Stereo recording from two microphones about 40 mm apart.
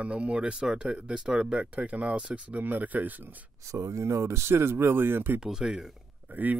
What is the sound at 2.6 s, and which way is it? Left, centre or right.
Speech, right.